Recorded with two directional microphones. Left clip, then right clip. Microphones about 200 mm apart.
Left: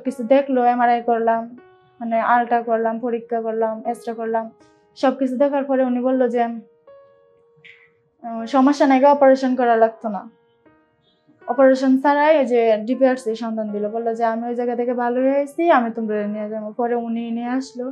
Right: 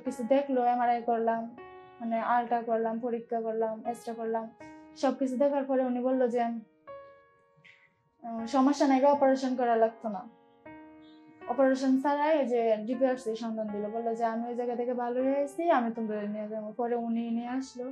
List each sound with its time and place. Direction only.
0.0 s a woman's voice: 20° left (ahead or behind)
8.2 s a woman's voice: 15° left (ahead or behind)
11.5 s a woman's voice: 20° left (ahead or behind)